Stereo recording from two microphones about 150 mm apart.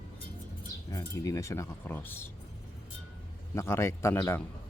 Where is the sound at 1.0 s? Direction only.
20° left (ahead or behind).